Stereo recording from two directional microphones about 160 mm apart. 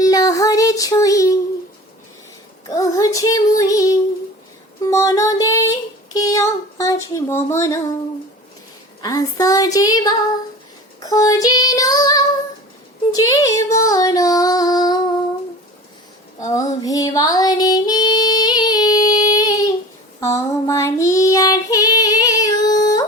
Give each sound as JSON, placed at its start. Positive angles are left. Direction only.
{"t": 0.0, "sound": "child singing", "side_deg": 20}
{"t": 2.6, "sound": "child singing", "side_deg": 20}
{"t": 6.1, "sound": "speech", "side_deg": 20}
{"t": 9.0, "sound": "child singing", "side_deg": 20}
{"t": 16.4, "sound": "music", "side_deg": 20}
{"t": 20.1, "sound": "child singing", "side_deg": 20}